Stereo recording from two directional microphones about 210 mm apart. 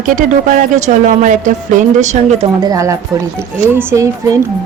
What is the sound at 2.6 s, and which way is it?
Speech, 15° right (ahead or behind).